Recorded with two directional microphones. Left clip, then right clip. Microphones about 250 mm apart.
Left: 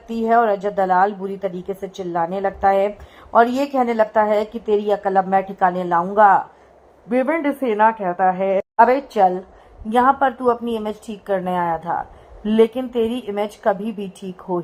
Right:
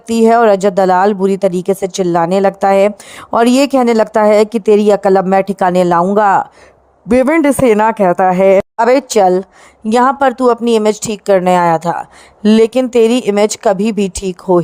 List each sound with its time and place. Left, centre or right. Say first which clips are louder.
0.1 s a woman's voice: right 8 dB; right